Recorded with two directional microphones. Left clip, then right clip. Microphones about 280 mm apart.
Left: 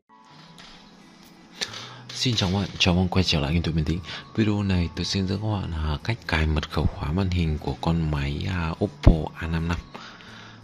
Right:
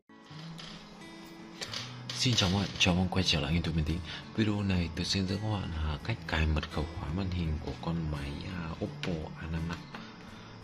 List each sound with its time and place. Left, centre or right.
2.1 s speech: centre